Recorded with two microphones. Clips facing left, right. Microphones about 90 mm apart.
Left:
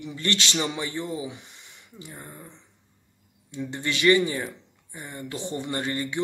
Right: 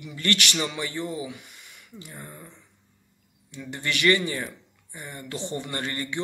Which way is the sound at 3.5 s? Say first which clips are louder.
Left 1 dB; 20° left (ahead or behind).